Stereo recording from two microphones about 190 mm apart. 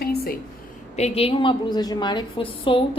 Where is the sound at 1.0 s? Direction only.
35° left (ahead or behind).